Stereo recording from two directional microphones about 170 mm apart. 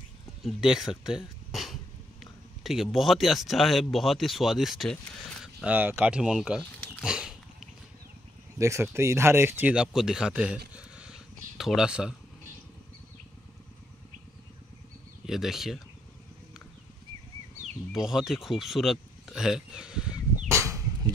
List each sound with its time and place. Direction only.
0.4 s speech: 5° right (ahead or behind)
8.5 s speech: 15° right (ahead or behind)
10.7 s a sound: 5° right (ahead or behind)
15.2 s speech: centre (ahead or behind)
17.9 s speech: centre (ahead or behind)
20.4 s a sound: 15° right (ahead or behind)